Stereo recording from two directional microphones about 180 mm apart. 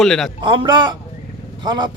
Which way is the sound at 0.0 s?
Centre (ahead or behind).